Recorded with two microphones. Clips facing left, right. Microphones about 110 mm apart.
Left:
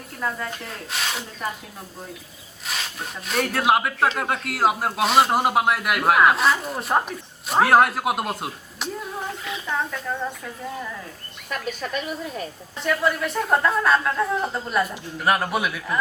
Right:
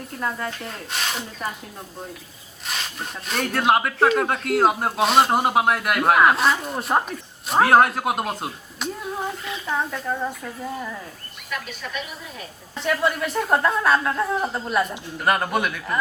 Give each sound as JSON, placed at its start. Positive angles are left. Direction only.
{"t": 0.2, "sound": "speech", "side_deg": 0}
{"t": 2.6, "sound": "speech", "side_deg": 0}
{"t": 9.6, "sound": "speech", "side_deg": -10}
{"t": 11.4, "sound": "speech", "side_deg": 40}
{"t": 12.7, "sound": "speech", "side_deg": 0}